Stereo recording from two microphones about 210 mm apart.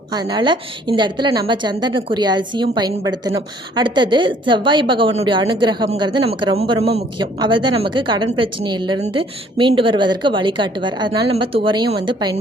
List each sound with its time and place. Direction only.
0.1 s a woman's voice: 20° right (ahead or behind)